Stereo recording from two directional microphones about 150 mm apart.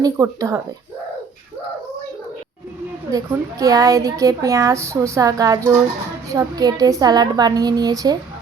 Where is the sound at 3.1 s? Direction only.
20° right (ahead or behind).